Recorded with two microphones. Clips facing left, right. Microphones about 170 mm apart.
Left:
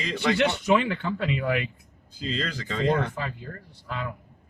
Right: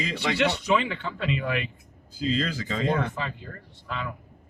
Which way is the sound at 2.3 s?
5° right (ahead or behind).